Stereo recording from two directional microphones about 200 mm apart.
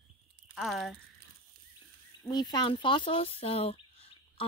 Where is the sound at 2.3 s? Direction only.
20° left (ahead or behind).